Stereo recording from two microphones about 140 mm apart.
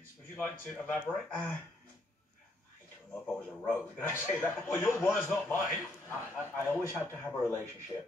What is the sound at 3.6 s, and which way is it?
A man's voice, 15° left (ahead or behind).